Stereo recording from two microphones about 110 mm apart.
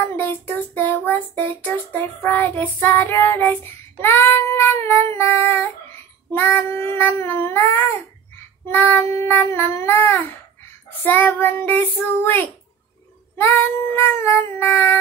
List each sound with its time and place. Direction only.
0.7 s child singing: 15° left (ahead or behind)